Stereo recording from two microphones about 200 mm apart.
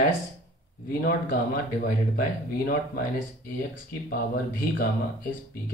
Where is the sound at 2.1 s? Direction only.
50° left (ahead or behind).